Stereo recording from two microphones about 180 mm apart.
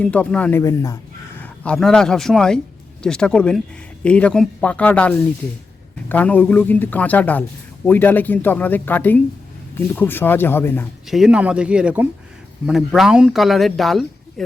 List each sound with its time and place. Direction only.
0.0 s speech: 5° left (ahead or behind)
0.6 s speech: 20° left (ahead or behind)
1.4 s speech: 5° left (ahead or behind)
11.1 s speech: 5° right (ahead or behind)